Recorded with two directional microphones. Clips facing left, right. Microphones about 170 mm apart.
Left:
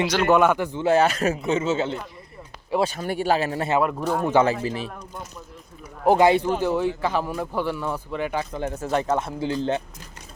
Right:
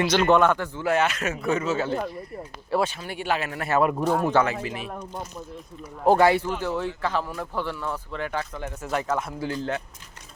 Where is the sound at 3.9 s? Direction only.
10° right (ahead or behind).